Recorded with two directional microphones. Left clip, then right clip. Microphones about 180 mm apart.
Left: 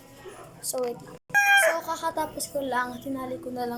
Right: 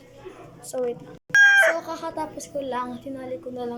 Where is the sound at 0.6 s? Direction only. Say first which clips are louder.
Right 2 dB; 15° right (ahead or behind).